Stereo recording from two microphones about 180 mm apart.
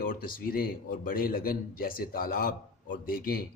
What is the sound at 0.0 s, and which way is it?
A man's voice, 50° left (ahead or behind).